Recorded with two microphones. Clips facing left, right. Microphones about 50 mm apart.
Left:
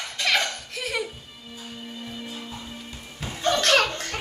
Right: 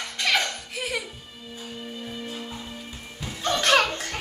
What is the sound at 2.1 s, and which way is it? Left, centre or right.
Music, centre.